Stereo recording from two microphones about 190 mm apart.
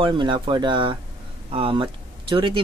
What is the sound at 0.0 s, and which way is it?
Speech, 25° right (ahead or behind).